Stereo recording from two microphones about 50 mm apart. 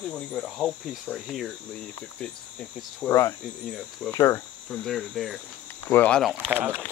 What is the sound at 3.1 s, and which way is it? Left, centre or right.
Cricket, left.